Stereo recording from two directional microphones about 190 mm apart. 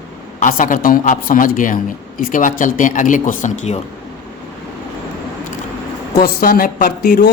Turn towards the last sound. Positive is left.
turn(degrees=55)  # may be behind; listen again after turning